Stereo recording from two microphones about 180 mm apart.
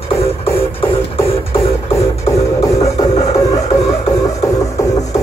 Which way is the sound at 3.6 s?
35° left (ahead or behind).